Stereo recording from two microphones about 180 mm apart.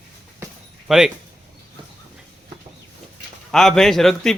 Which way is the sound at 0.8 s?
Centre (ahead or behind).